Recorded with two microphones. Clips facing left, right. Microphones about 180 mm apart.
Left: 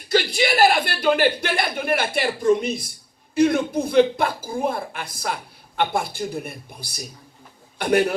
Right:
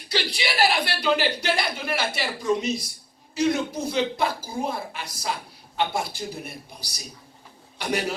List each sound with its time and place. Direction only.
0.1 s a man's voice: 50° left (ahead or behind)